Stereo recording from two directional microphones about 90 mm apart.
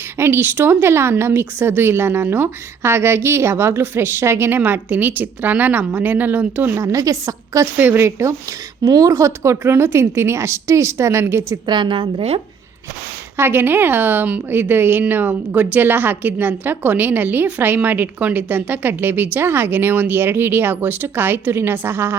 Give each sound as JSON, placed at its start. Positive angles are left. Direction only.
{"t": 0.2, "sound": "a woman's voice", "side_deg": -25}
{"t": 6.7, "sound": "a woman's voice", "side_deg": -35}
{"t": 7.8, "sound": "a woman's voice", "side_deg": -25}
{"t": 11.6, "sound": "a woman's voice", "side_deg": -60}
{"t": 13.3, "sound": "a woman's voice", "side_deg": -25}